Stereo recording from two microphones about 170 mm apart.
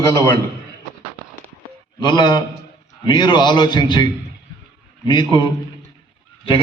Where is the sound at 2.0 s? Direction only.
25° left (ahead or behind).